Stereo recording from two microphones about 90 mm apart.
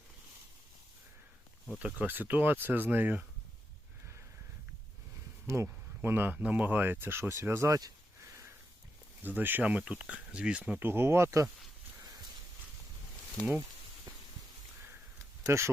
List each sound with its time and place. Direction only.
1.8 s speech: 20° right (ahead or behind)
5.5 s speech: 30° right (ahead or behind)
9.2 s speech: 20° right (ahead or behind)
15.4 s speech: 30° right (ahead or behind)